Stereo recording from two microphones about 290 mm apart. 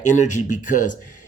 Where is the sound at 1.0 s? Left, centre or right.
Left.